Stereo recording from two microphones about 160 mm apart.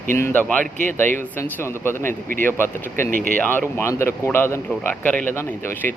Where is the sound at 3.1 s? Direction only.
60° right (ahead or behind).